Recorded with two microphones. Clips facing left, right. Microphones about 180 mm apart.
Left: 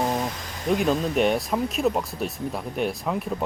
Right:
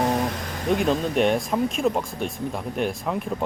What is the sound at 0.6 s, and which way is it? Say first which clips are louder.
Speech: even; centre (ahead or behind).